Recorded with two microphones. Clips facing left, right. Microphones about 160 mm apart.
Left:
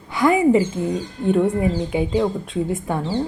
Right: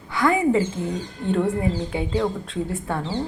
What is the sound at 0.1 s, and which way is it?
Speech, 20° left (ahead or behind).